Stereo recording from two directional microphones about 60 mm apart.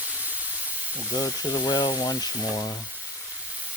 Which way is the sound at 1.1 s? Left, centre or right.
Left.